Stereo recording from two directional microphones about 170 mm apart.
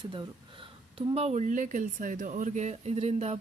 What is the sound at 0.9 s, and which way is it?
Speech, 40° right (ahead or behind).